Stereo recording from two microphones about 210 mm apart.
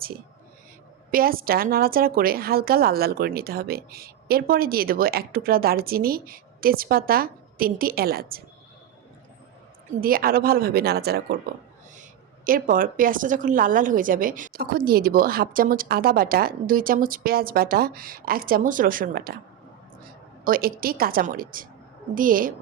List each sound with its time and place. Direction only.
1.1 s a woman's voice: 45° right (ahead or behind)
10.0 s a woman's voice: 45° right (ahead or behind)
12.5 s a woman's voice: 40° right (ahead or behind)
20.4 s a woman's voice: 45° right (ahead or behind)